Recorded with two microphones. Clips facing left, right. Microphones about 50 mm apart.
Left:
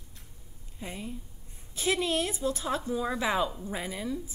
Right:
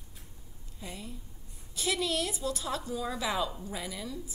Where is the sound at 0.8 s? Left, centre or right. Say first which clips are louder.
Left 4 dB; left.